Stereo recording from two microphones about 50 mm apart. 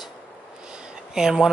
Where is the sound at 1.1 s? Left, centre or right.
Centre.